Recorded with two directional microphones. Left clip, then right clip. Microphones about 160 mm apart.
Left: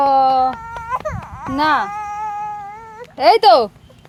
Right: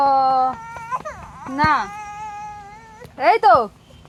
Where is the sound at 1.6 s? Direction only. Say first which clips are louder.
Left 2 dB; 10° left (ahead or behind).